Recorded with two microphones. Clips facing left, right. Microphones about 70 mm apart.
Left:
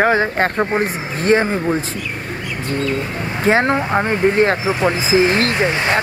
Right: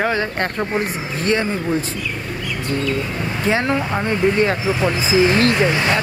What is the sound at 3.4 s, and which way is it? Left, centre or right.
Speech, left.